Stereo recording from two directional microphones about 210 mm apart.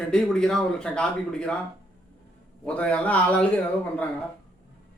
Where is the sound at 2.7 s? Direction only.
5° left (ahead or behind).